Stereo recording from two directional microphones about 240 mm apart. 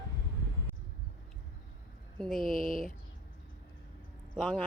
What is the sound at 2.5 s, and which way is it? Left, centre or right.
Speech, left.